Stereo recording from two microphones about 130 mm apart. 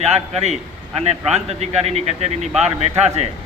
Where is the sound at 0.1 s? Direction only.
55° right (ahead or behind).